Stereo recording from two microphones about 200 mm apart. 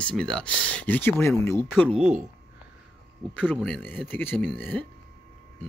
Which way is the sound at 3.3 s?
Centre (ahead or behind).